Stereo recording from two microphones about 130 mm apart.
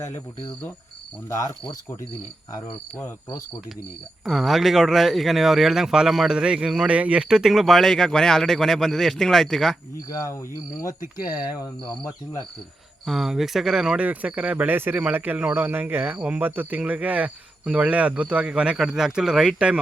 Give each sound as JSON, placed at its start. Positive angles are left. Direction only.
{"t": 1.4, "sound": "cricket", "side_deg": 30}
{"t": 4.3, "sound": "speech", "side_deg": 0}
{"t": 10.1, "sound": "cricket", "side_deg": 25}
{"t": 11.0, "sound": "speech", "side_deg": 90}
{"t": 13.1, "sound": "speech", "side_deg": 0}